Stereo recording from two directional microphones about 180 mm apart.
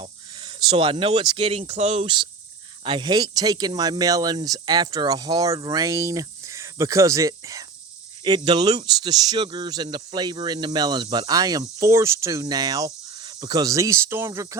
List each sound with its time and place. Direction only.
0.0 s speech: 30° right (ahead or behind)